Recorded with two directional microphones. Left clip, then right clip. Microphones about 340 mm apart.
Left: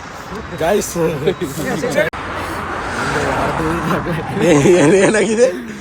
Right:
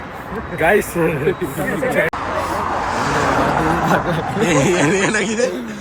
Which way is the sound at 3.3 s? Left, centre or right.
Right.